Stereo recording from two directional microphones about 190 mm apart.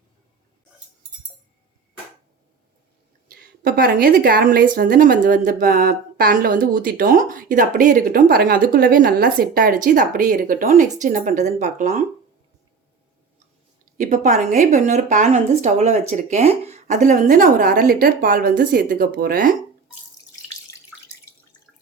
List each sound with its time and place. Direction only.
3.2 s a woman's voice: 50° right (ahead or behind)
14.0 s a woman's voice: 40° right (ahead or behind)